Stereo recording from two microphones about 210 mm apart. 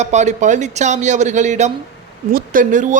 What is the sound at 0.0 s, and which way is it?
Speech, 35° right (ahead or behind).